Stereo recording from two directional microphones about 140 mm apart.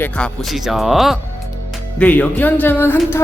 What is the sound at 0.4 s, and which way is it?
Speech, centre (ahead or behind).